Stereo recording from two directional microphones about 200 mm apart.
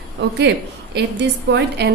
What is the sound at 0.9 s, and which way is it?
Speech, 55° right (ahead or behind).